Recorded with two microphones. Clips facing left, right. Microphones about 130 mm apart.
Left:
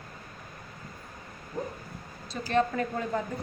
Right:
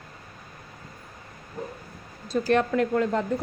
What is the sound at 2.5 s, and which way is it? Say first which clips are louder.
Speech: right 4 dB; 70° right (ahead or behind).